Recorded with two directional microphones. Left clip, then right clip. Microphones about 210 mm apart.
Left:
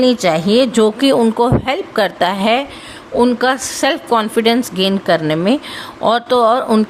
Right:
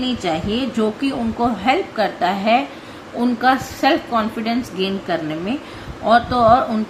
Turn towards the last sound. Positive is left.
turn(degrees=50)  # may be behind; listen again after turning